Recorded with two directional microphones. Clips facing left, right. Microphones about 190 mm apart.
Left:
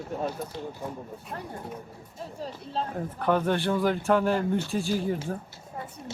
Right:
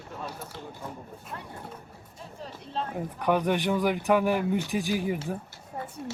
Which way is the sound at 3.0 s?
15° right (ahead or behind).